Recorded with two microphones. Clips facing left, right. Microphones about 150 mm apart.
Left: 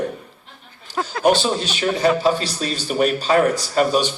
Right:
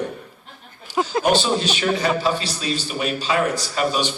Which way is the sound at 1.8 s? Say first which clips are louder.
Left 3 dB; 40° left (ahead or behind).